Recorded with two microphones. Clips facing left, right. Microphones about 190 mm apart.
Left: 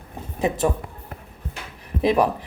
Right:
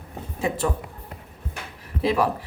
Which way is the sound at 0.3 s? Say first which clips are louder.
Left 3 dB; 20° left (ahead or behind).